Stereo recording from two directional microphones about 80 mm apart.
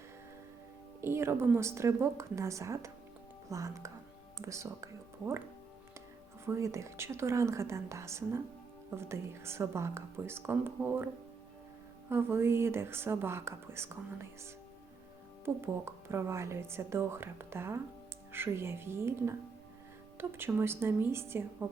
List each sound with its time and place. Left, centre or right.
1.0 s a woman's voice: right
6.4 s a woman's voice: right